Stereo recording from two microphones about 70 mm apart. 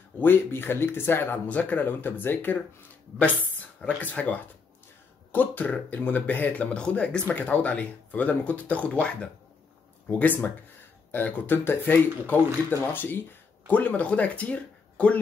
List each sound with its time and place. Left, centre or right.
0.2 s speech: left